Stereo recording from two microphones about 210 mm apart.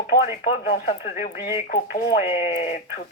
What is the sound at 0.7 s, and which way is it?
Speech, 50° left (ahead or behind).